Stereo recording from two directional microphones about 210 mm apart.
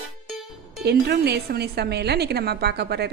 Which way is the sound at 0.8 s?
50° right (ahead or behind).